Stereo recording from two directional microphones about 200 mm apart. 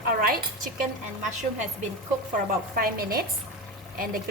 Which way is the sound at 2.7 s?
50° right (ahead or behind).